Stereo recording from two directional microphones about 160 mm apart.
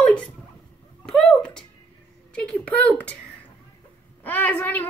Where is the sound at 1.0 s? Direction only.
5° left (ahead or behind).